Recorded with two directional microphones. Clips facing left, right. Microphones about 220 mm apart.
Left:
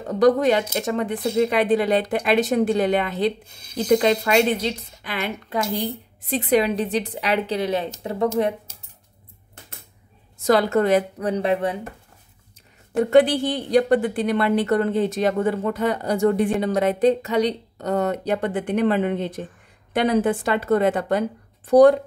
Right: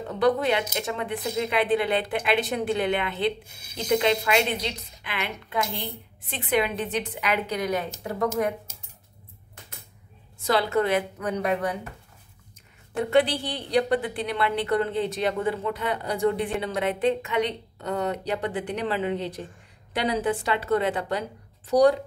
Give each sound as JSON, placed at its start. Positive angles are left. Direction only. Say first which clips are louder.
{"t": 0.1, "sound": "speech", "louder": "left 6 dB", "side_deg": 40}
{"t": 10.4, "sound": "speech", "louder": "left 5 dB", "side_deg": 45}
{"t": 12.9, "sound": "a woman's voice", "louder": "left 6 dB", "side_deg": 45}